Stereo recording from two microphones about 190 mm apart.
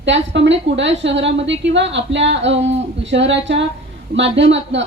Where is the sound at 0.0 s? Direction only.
70° right (ahead or behind).